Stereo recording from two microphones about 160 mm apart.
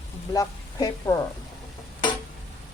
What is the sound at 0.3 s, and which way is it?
Speech, 20° left (ahead or behind).